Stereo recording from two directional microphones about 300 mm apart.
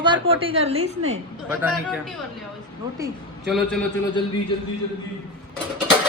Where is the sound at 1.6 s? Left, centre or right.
Centre.